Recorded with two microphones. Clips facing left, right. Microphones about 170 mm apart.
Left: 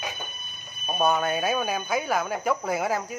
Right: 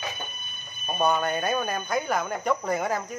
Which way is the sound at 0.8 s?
5° left (ahead or behind).